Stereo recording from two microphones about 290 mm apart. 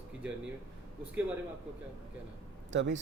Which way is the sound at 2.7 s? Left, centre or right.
Right.